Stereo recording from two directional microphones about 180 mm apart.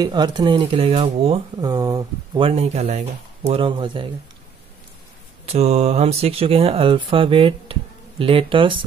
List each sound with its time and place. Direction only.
0.0 s speech: 25° right (ahead or behind)
1.6 s speech: 20° right (ahead or behind)
5.5 s speech: 35° right (ahead or behind)